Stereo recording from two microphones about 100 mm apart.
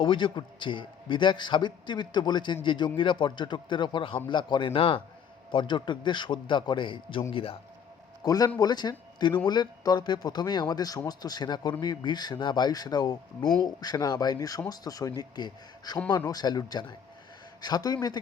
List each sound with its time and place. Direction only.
0.0 s a man's voice: 55° left (ahead or behind)
8.2 s a man's voice: 40° left (ahead or behind)